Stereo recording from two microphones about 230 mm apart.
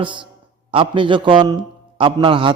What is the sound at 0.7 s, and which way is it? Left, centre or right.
A man's voice, right.